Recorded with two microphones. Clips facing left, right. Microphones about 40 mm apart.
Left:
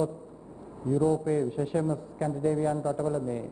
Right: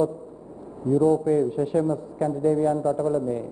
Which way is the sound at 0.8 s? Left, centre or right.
Centre.